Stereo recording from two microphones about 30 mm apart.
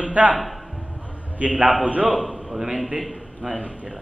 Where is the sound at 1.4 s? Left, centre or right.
Right.